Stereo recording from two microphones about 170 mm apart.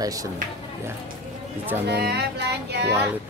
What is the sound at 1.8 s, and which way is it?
Speech, 75° right (ahead or behind).